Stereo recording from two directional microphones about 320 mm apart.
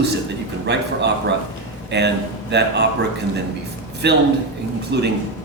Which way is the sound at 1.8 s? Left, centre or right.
Right.